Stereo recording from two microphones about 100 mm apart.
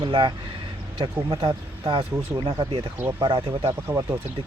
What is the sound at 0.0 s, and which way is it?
Speech, 55° right (ahead or behind).